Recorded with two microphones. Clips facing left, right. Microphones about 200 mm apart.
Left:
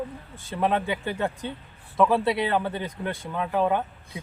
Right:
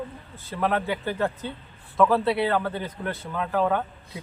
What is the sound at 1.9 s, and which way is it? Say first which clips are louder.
Speech: right 1 dB; 15° left (ahead or behind).